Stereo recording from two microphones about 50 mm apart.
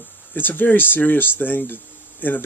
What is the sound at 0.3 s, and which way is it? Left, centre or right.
Speech, left.